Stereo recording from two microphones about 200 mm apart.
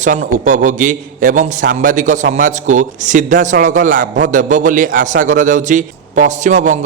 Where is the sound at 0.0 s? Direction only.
40° right (ahead or behind).